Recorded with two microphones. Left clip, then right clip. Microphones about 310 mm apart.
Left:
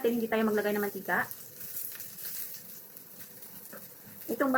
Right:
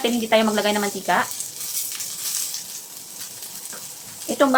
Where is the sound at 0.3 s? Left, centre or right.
Right.